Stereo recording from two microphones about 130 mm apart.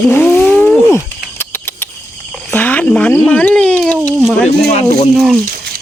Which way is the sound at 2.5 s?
10° left (ahead or behind).